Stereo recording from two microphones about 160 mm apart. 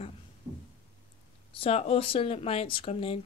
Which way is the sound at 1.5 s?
35° left (ahead or behind).